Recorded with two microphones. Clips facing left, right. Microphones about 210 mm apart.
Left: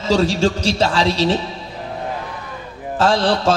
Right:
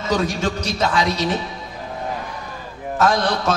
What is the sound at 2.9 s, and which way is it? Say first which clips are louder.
Mantra: left 2 dB; 30° left (ahead or behind).